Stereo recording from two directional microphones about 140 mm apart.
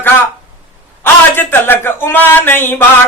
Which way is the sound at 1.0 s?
15° left (ahead or behind).